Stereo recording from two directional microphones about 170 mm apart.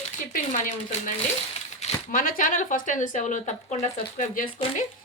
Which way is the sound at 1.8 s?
50° left (ahead or behind).